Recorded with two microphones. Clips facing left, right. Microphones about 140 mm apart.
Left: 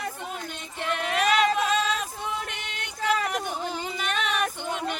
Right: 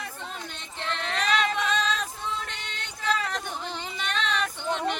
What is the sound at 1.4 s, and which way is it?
Singing, 40° left (ahead or behind).